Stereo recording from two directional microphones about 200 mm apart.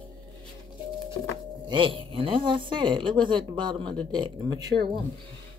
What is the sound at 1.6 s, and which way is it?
Speech, 25° right (ahead or behind).